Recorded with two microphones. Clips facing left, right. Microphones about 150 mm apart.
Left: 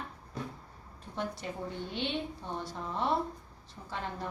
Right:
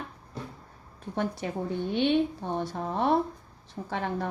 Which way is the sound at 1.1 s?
55° right (ahead or behind).